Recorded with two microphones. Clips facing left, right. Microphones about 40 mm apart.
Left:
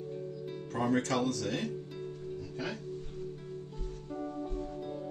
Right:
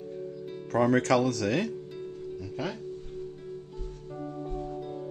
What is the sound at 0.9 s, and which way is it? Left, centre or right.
Speech, right.